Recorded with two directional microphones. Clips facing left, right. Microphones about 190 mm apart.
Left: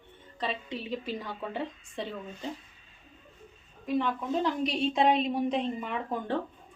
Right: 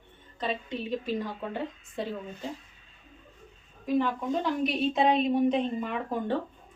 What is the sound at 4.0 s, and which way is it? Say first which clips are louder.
Speech: even; centre (ahead or behind).